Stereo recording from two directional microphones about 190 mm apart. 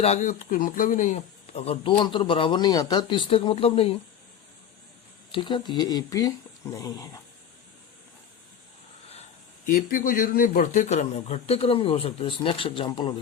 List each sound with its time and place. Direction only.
0.0 s speech: 35° left (ahead or behind)
5.3 s speech: 25° left (ahead or behind)
9.6 s speech: 50° left (ahead or behind); by 13.1 s 25° left (ahead or behind)